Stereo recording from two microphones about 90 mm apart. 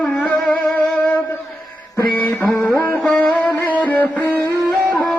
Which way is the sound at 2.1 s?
20° left (ahead or behind).